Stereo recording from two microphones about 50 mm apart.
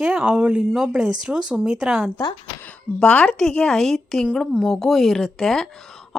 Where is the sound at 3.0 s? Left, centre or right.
Left.